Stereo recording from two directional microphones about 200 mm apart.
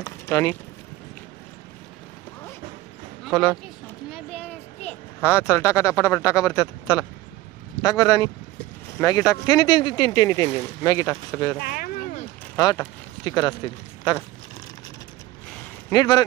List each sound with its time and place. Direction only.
0.0 s speech: 15° left (ahead or behind)
3.3 s speech: 5° left (ahead or behind)
4.1 s a sound: 5° left (ahead or behind)
7.8 s speech: 15° left (ahead or behind)
11.6 s a sound: 45° left (ahead or behind)
12.5 s speech: 10° left (ahead or behind)
15.9 s speech: 20° left (ahead or behind)